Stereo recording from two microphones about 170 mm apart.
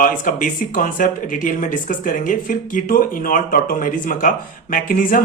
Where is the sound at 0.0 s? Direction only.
50° left (ahead or behind).